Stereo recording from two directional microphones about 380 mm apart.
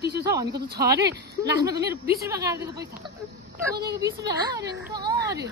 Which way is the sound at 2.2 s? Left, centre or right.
Centre.